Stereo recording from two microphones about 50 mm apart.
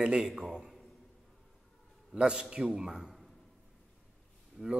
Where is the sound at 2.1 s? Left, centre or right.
Centre.